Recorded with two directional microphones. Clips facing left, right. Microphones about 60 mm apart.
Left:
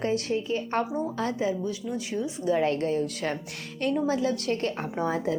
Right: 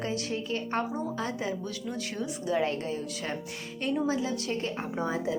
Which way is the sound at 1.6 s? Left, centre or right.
Centre.